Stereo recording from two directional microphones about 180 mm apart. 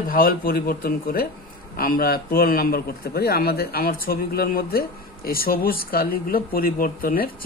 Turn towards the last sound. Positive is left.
turn(degrees=55)  # may be behind; listen again after turning